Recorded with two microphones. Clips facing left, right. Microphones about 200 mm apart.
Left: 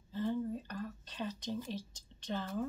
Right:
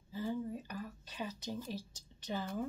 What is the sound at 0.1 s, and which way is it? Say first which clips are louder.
Whispering: left 3 dB; 10° right (ahead or behind).